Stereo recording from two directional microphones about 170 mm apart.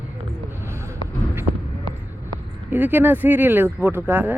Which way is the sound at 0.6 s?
15° right (ahead or behind).